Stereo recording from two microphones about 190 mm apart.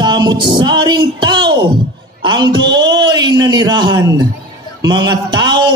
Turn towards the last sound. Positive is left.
turn(degrees=-20)  # may be behind; listen again after turning